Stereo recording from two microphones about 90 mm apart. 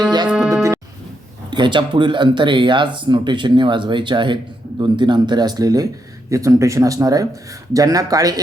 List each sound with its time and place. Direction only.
0.3 s music: 5° right (ahead or behind)
0.5 s music: 35° right (ahead or behind)
1.5 s speech: 60° right (ahead or behind); by 8.4 s 40° right (ahead or behind)